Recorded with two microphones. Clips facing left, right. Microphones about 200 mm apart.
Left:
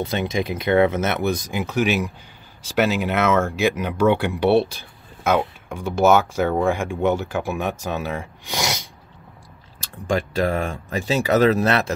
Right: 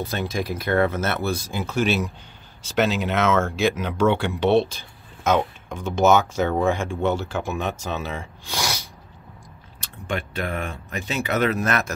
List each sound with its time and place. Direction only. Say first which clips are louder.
0.0 s speech: left 3 dB; 20° left (ahead or behind)
8.5 s a sound: left 3 dB; 20° left (ahead or behind)
10.1 s speech: left 6 dB; 35° left (ahead or behind)